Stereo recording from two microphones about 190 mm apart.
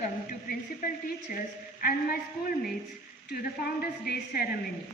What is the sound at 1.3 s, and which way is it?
A woman's voice, 50° left (ahead or behind).